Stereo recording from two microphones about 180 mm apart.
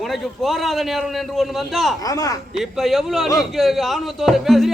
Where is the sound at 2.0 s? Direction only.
20° left (ahead or behind).